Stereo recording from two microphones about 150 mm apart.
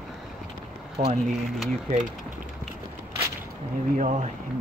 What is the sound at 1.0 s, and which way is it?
Speech, 55° right (ahead or behind).